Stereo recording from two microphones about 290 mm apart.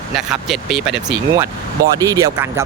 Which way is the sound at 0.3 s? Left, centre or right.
Centre.